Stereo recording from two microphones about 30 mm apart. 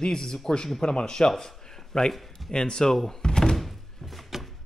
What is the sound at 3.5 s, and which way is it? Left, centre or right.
Thunk, centre.